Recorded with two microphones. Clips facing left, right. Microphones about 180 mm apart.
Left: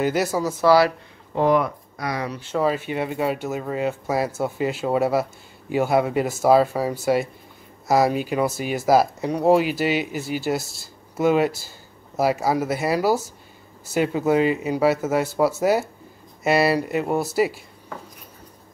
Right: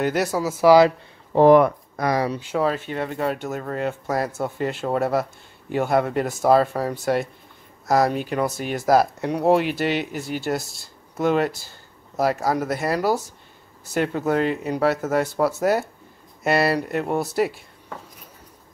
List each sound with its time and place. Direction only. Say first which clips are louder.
0.0 s speech: even; centre (ahead or behind); by 0.9 s 15° right (ahead or behind)
1.3 s speech: right 6 dB; 45° right (ahead or behind)
2.3 s speech: right 1 dB; 15° right (ahead or behind)
2.6 s speech: left 2 dB; 5° left (ahead or behind)